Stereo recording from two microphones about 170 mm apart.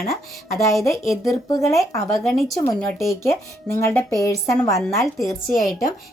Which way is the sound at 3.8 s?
15° left (ahead or behind).